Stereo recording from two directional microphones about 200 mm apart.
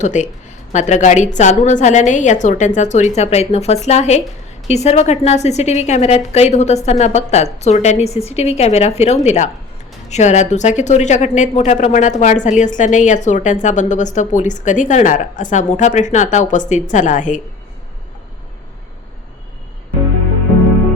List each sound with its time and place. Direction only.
0.0 s speech: 35° left (ahead or behind)